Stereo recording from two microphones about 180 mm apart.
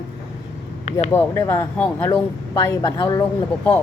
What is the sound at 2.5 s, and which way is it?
Speech, 25° left (ahead or behind).